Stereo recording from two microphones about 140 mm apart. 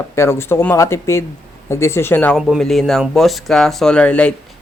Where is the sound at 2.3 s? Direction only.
Centre (ahead or behind).